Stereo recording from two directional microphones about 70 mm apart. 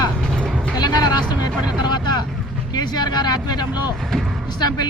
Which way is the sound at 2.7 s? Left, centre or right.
Left.